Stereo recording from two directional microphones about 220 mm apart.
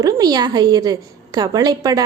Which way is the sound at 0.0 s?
15° right (ahead or behind).